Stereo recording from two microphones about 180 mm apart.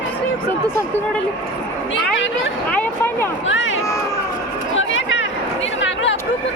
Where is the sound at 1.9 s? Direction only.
90° left.